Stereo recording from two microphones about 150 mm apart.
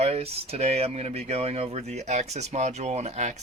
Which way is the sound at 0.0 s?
40° right (ahead or behind).